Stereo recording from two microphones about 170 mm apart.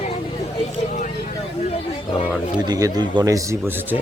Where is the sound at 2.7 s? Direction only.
20° right (ahead or behind).